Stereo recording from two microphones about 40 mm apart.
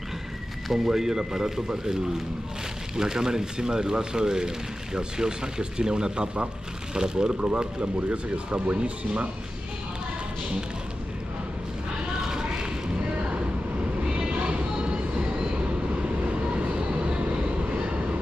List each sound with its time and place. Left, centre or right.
0.7 s speech: centre
3.0 s speech: centre
7.3 s speech: right
12.2 s a sound: centre
14.0 s vehicle: right
16.3 s vehicle: right